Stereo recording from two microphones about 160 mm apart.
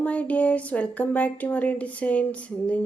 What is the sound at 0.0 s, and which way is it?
A woman's voice, 10° left (ahead or behind).